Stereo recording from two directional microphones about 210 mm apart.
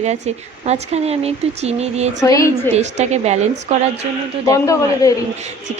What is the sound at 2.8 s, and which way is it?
Speech, 35° right (ahead or behind).